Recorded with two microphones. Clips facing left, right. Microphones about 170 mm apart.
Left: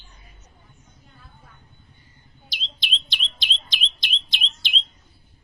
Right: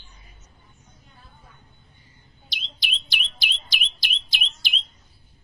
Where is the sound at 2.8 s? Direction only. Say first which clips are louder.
Right 1 dB; 10° right (ahead or behind).